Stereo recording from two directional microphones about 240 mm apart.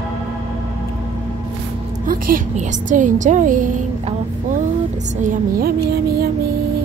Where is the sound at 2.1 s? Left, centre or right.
Right.